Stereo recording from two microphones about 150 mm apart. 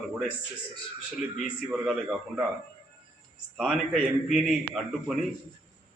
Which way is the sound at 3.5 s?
Centre (ahead or behind).